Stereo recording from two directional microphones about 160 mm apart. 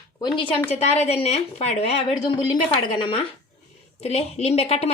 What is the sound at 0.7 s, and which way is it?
Speech, 45° left (ahead or behind).